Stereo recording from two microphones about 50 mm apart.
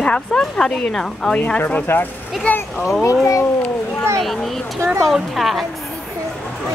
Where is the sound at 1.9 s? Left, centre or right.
Left.